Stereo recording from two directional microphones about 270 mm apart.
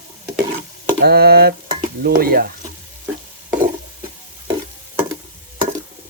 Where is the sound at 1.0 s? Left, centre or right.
Right.